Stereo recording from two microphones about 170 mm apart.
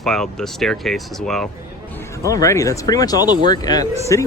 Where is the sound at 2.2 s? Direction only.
20° left (ahead or behind).